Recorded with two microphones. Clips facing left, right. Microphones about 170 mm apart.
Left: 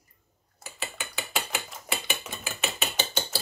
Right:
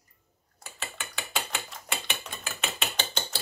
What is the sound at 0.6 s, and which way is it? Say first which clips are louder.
Ratchet: left 3 dB; 5° left (ahead or behind).